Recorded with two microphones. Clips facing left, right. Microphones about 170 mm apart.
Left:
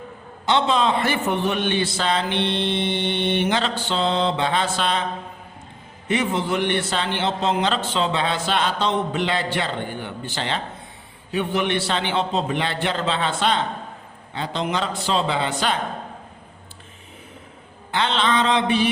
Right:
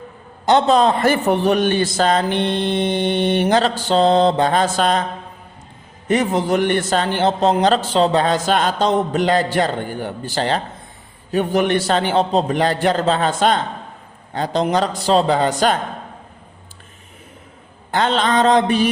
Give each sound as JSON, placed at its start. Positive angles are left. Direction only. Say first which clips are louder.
{"t": 0.4, "sound": "a man's voice", "louder": "right 6 dB", "side_deg": -45}
{"t": 6.1, "sound": "a man's voice", "louder": "right 5 dB", "side_deg": -40}
{"t": 17.9, "sound": "a man's voice", "louder": "right 4 dB", "side_deg": -45}